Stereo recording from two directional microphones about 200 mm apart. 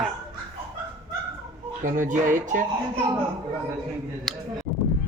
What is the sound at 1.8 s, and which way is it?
Speech, 40° right (ahead or behind).